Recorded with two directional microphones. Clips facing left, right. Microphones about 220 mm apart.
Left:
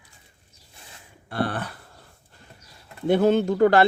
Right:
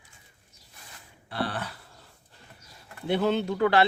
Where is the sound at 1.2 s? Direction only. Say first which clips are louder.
Left 5 dB; 50° left (ahead or behind).